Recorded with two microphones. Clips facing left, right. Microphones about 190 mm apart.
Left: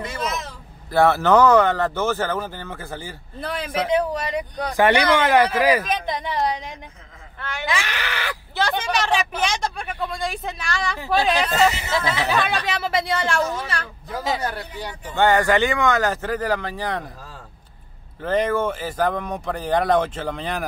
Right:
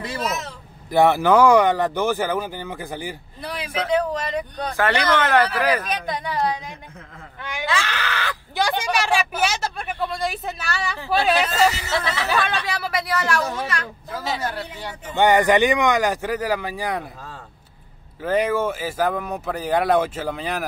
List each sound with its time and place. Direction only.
0.2 s a sound: 5° right (ahead or behind)
0.9 s speech: 15° right (ahead or behind)
3.7 s speech: 10° left (ahead or behind)
6.0 s a woman's voice: 20° left (ahead or behind)
7.3 s speech: 15° right (ahead or behind)
7.6 s speech: 15° left (ahead or behind)
8.5 s speech: 10° right (ahead or behind)
11.5 s a woman's voice: 25° left (ahead or behind)
12.3 s speech: centre (ahead or behind)
12.6 s a woman's voice: 25° left (ahead or behind)
15.1 s speech: 15° right (ahead or behind)
18.2 s speech: 10° right (ahead or behind)